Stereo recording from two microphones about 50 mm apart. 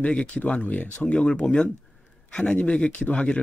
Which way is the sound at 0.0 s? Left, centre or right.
Left.